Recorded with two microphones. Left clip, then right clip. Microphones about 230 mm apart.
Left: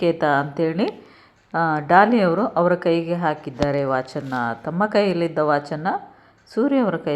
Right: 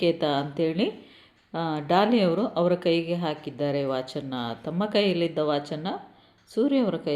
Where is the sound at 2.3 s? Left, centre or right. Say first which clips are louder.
Left 5 dB; centre.